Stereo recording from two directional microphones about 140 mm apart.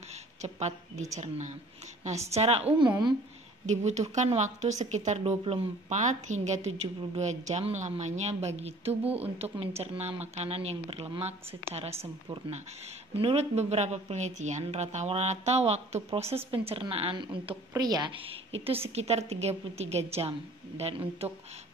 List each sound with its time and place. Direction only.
0.4 s a woman's voice: 55° right (ahead or behind)
2.0 s a woman's voice: 50° right (ahead or behind)
2.8 s speech: 30° right (ahead or behind)
3.6 s a woman's voice: 55° right (ahead or behind)
5.4 s a woman's voice: 45° right (ahead or behind)
13.1 s a woman's voice: 45° right (ahead or behind)